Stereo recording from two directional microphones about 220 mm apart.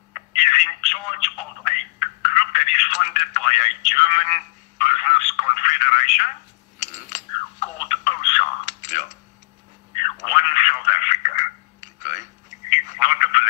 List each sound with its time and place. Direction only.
0.1 s telephone: 35° left (ahead or behind)
7.6 s telephone: 35° left (ahead or behind)
12.0 s a sound: 30° left (ahead or behind)
12.7 s telephone: 35° left (ahead or behind)